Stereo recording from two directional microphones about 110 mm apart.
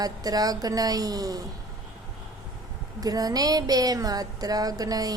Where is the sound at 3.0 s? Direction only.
35° right (ahead or behind).